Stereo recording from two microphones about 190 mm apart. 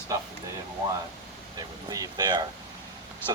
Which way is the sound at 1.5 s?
20° right (ahead or behind).